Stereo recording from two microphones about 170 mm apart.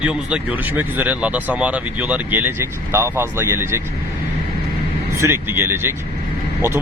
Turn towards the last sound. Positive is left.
turn(degrees=-15)  # may be behind; listen again after turning